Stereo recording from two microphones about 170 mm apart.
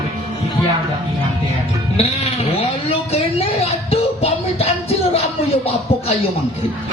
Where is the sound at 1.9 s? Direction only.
35° left (ahead or behind).